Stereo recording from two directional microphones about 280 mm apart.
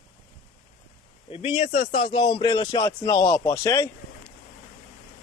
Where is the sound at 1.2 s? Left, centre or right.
Centre.